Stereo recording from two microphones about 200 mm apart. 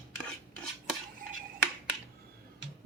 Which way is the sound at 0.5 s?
5° left (ahead or behind).